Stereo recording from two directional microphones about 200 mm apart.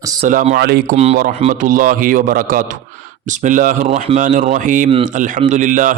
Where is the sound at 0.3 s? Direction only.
40° right (ahead or behind).